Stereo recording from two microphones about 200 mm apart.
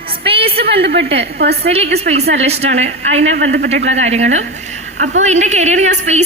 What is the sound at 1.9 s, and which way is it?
A woman's voice, 30° right (ahead or behind).